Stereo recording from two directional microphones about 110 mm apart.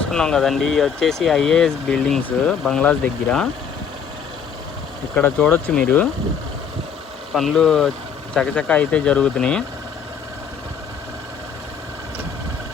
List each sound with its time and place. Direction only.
0.1 s speech: 5° left (ahead or behind)
5.1 s speech: 15° left (ahead or behind)
7.3 s speech: 5° left (ahead or behind)